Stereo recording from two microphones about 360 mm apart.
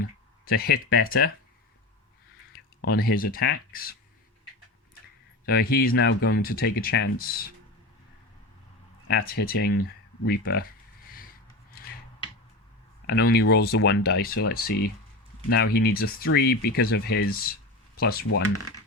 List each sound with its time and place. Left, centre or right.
0.4 s speech: left
2.8 s speech: left
5.5 s speech: left
9.0 s speech: left
10.2 s a sound: left
13.1 s speech: left